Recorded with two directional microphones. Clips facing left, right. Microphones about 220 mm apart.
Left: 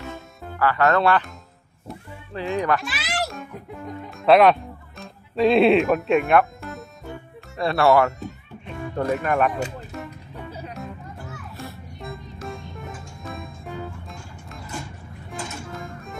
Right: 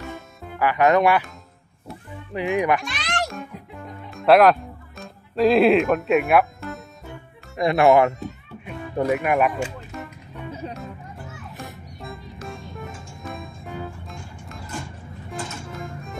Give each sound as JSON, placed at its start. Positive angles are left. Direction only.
{"t": 0.6, "sound": "speech", "side_deg": -15}
{"t": 2.8, "sound": "speech", "side_deg": 5}
{"t": 4.1, "sound": "music", "side_deg": 0}
{"t": 5.3, "sound": "speech", "side_deg": 0}
{"t": 7.5, "sound": "speech", "side_deg": -15}
{"t": 8.6, "sound": "music", "side_deg": -15}
{"t": 12.0, "sound": "music", "side_deg": 0}
{"t": 15.8, "sound": "music", "side_deg": 0}